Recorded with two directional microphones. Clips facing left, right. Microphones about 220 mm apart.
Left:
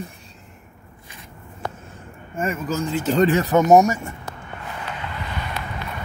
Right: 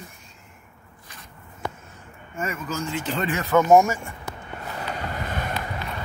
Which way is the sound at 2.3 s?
35° left (ahead or behind).